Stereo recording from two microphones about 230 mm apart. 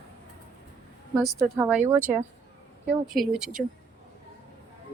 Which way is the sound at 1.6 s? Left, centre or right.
Centre.